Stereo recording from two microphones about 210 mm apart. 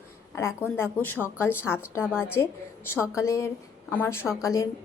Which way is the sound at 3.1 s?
15° left (ahead or behind).